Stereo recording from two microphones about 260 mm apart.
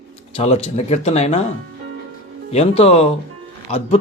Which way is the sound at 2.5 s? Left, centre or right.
Left.